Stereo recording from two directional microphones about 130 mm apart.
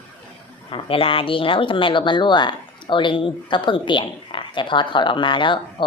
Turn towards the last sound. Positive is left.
turn(degrees=40)  # may be behind; listen again after turning